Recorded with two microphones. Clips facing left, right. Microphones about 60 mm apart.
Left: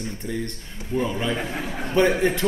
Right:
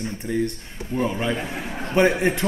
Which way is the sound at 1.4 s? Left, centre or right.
Centre.